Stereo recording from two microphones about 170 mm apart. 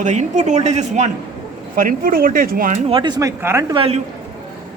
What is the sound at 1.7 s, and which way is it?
Speech, 55° right (ahead or behind).